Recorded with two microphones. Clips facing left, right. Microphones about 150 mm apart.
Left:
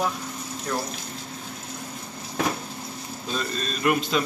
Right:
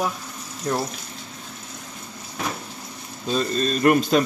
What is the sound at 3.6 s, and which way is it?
Speech, 45° right (ahead or behind).